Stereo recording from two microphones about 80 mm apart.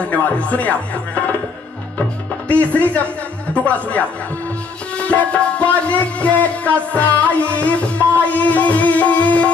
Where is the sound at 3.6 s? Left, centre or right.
Centre.